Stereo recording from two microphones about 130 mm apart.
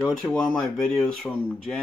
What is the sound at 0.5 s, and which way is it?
Speech, 5° left (ahead or behind).